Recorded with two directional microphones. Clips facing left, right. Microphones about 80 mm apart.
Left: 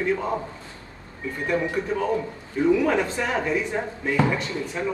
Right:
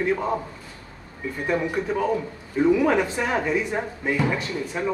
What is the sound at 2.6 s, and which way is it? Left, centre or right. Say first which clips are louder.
Speech: right 1 dB; centre.